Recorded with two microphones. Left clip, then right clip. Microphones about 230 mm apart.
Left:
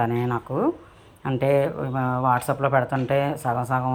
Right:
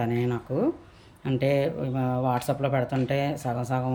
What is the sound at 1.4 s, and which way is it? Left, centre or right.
Speech, left.